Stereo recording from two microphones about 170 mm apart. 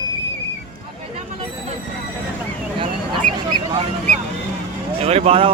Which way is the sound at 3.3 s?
25° right (ahead or behind).